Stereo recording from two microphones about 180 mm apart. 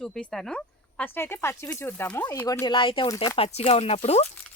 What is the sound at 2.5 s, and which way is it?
Speech, 20° left (ahead or behind).